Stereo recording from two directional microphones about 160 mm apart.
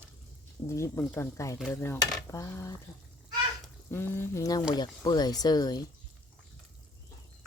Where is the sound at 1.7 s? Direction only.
15° left (ahead or behind).